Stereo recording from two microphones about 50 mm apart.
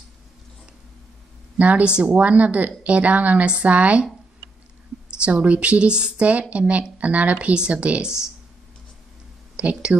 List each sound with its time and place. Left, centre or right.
1.6 s speech: right
5.2 s speech: right
9.6 s speech: right